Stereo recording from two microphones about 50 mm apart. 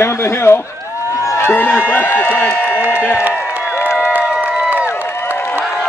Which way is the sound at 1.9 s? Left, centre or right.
Left.